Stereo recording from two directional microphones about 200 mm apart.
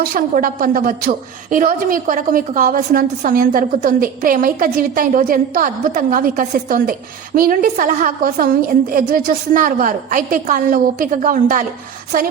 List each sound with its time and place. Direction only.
0.0 s a woman's voice: 45° right (ahead or behind)